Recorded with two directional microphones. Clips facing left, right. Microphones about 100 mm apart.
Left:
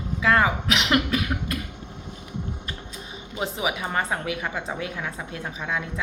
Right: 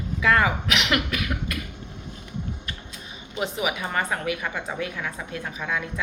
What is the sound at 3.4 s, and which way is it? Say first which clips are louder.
A woman's voice: even; 25° left (ahead or behind).